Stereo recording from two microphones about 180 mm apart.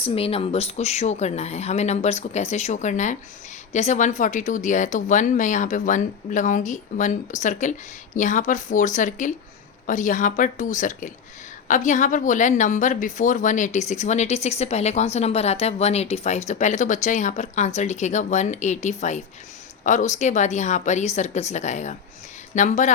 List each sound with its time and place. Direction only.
0.0 s a woman's voice: 30° left (ahead or behind)